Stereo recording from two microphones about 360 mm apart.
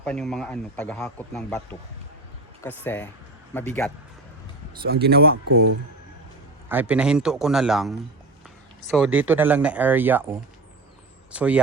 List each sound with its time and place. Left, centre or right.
0.0 s a man's voice: centre
2.6 s a man's voice: centre
4.8 s speech: right
5.5 s speech: right
6.7 s a man's voice: centre
11.3 s a man's voice: centre